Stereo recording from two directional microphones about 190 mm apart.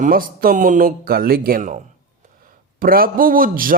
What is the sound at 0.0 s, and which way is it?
A man's voice, 50° right (ahead or behind).